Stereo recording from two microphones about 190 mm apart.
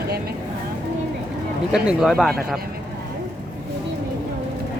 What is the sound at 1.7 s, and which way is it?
Speech, 5° right (ahead or behind).